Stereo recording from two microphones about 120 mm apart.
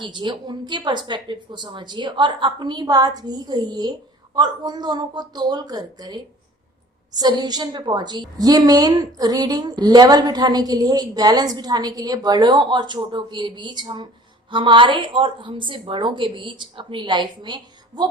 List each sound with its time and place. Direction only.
0.0 s a woman's voice: 40° right (ahead or behind)
7.2 s a woman's voice: 35° right (ahead or behind)